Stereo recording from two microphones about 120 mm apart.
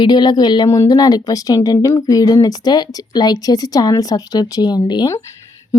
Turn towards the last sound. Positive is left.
turn(degrees=35)  # may be behind; listen again after turning